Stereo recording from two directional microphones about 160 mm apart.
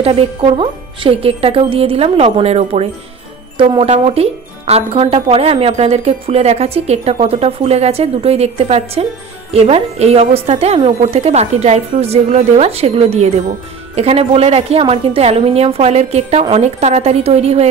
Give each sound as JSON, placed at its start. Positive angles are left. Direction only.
{"t": 0.0, "sound": "speech", "side_deg": -35}